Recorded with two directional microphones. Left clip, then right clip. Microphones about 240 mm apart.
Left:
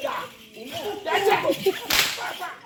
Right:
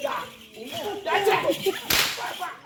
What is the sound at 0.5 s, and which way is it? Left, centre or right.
Speech, centre.